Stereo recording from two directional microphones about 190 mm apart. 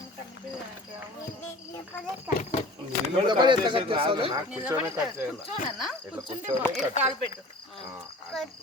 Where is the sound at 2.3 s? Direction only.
45° left (ahead or behind).